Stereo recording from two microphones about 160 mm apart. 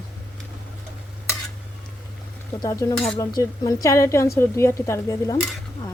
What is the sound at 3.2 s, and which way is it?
A woman's voice, 25° left (ahead or behind).